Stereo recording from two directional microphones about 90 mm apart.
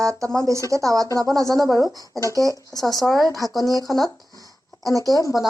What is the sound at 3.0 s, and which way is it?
Speech, centre (ahead or behind).